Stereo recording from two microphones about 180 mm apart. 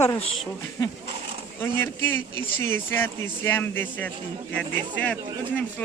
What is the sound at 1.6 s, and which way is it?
Speech, 10° left (ahead or behind).